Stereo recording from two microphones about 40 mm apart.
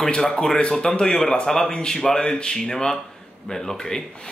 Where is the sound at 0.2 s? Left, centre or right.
Centre.